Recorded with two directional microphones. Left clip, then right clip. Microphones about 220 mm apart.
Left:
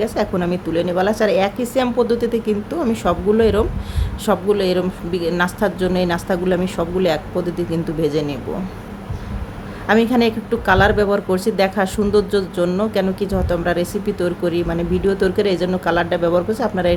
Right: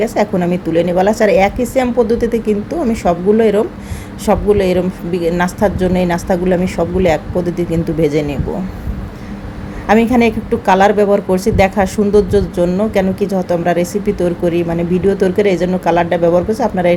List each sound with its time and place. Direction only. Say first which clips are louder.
0.0 s speech: right 5 dB; 5° right (ahead or behind)
9.8 s speech: right 4 dB; centre (ahead or behind)